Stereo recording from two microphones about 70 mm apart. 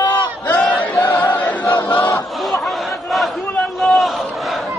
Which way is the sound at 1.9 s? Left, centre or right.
Left.